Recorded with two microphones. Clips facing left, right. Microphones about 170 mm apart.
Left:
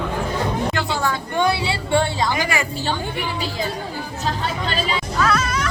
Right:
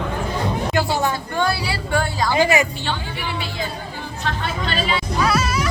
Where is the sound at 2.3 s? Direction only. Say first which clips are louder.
Right 6 dB; 20° right (ahead or behind).